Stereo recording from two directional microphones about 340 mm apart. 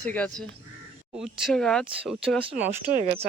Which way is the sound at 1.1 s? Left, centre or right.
Centre.